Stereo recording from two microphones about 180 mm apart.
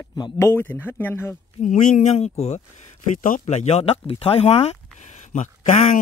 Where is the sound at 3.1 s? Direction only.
45° left (ahead or behind).